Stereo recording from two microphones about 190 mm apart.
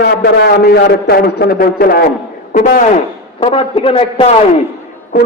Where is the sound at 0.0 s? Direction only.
60° left (ahead or behind).